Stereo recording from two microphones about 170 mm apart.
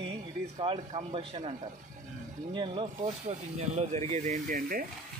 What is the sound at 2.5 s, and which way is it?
Speech, 30° right (ahead or behind).